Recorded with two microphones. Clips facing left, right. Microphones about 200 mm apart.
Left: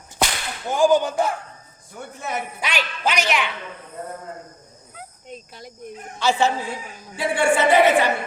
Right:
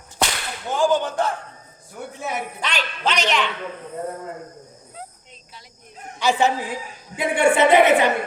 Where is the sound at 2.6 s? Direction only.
10° left (ahead or behind).